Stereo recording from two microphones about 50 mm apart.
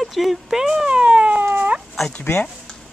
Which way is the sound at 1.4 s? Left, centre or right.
Right.